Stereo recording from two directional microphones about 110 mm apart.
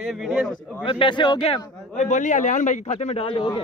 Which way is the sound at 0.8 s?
50° left (ahead or behind).